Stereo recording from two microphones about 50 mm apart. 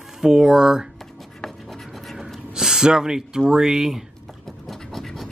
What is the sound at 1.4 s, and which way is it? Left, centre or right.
Rub, centre.